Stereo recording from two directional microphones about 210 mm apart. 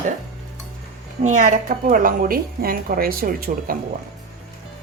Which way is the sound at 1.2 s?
35° right (ahead or behind).